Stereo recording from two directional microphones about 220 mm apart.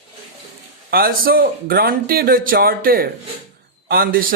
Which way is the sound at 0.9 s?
45° right (ahead or behind).